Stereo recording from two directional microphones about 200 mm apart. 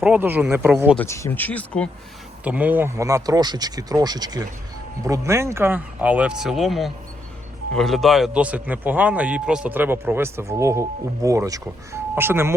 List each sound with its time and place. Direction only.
0.0 s speech: 10° right (ahead or behind)
0.9 s speech: 15° left (ahead or behind)
2.4 s speech: 5° right (ahead or behind)